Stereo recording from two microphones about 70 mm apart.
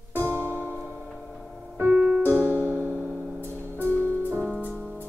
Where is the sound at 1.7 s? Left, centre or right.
Right.